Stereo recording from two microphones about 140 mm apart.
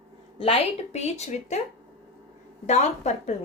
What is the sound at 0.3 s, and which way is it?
A woman's voice, 45° left (ahead or behind).